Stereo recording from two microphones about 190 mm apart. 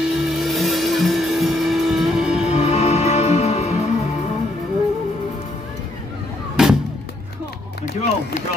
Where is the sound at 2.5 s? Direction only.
35° left (ahead or behind).